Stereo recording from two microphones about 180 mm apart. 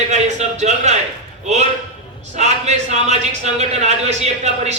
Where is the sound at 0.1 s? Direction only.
40° right (ahead or behind).